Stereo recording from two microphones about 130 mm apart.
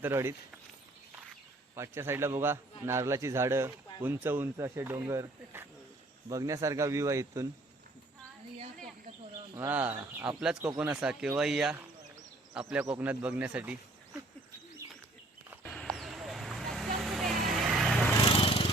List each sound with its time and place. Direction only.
0.0 s speech: 20° right (ahead or behind)
1.7 s speech: 20° right (ahead or behind)
9.6 s speech: 15° right (ahead or behind)
14.8 s bird: 25° right (ahead or behind)
15.7 s vehicle: 5° left (ahead or behind)
18.3 s lawn mower: 45° left (ahead or behind)